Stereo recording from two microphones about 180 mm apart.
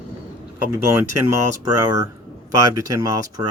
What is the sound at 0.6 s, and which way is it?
Speech, 15° right (ahead or behind).